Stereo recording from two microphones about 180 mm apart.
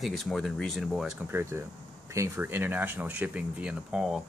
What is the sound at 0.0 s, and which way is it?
Speech, centre (ahead or behind).